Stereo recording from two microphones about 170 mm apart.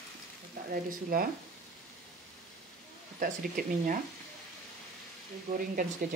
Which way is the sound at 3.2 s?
55° right (ahead or behind).